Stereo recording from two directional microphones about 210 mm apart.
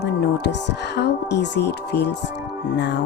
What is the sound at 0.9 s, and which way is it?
Speech, 55° left (ahead or behind).